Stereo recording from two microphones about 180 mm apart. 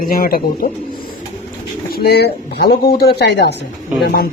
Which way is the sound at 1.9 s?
60° left (ahead or behind).